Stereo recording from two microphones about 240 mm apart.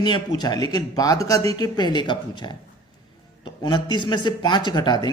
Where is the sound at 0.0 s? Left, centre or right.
Centre.